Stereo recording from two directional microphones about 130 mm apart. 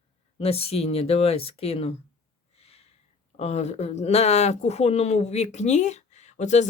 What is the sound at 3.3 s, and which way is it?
Speech, 60° left (ahead or behind).